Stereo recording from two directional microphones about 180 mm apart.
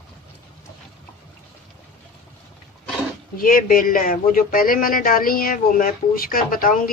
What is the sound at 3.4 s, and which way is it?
A man's voice, 50° left (ahead or behind).